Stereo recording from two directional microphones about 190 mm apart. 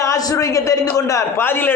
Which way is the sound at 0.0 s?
20° left (ahead or behind).